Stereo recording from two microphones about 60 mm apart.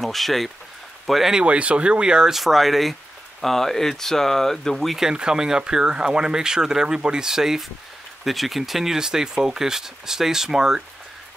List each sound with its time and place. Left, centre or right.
0.0 s speech: centre
1.3 s speech: centre
2.3 s speech: centre
5.0 s speech: centre